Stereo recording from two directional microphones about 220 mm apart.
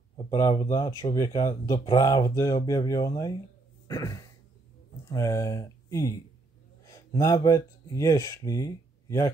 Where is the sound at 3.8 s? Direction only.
15° left (ahead or behind).